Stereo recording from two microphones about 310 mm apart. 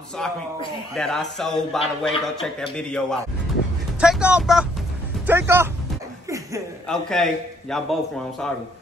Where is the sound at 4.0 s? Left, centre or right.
Centre.